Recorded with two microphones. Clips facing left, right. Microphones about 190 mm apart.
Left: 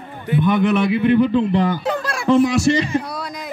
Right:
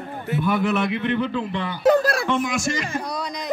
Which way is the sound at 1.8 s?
40° right (ahead or behind).